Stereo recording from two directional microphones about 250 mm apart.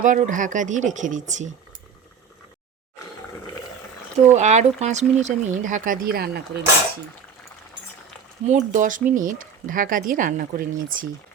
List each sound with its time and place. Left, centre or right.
0.0 s speech: right
4.4 s speech: right
8.4 s speech: right